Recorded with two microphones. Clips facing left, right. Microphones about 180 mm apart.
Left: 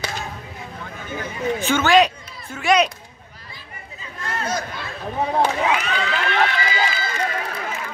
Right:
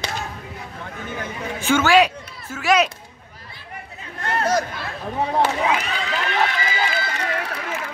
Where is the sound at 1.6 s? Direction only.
10° right (ahead or behind).